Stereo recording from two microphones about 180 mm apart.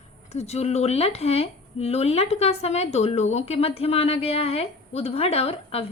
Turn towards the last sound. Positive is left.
turn(degrees=35)  # may be behind; listen again after turning